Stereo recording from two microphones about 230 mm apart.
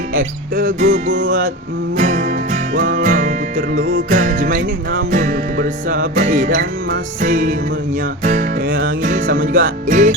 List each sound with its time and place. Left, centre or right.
0.5 s music: right
6.6 s music: right
7.3 s music: right